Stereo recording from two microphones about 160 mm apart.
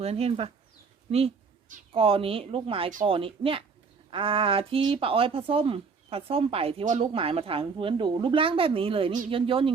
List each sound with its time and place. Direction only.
0.0 s speech: 40° right (ahead or behind)
1.9 s speech: 35° right (ahead or behind)